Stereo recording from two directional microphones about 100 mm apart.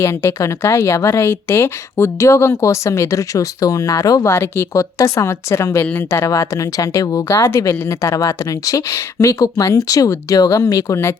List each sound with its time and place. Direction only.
0.0 s speech: 25° left (ahead or behind)